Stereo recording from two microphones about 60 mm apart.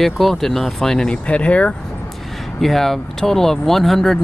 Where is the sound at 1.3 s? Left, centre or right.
Left.